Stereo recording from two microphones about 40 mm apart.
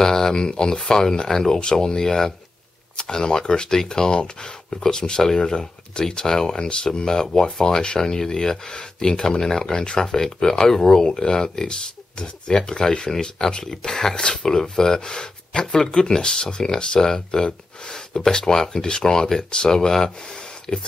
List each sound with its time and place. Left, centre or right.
0.0 s speech: centre